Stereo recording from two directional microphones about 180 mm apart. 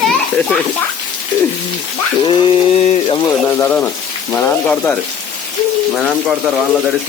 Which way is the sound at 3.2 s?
15° left (ahead or behind).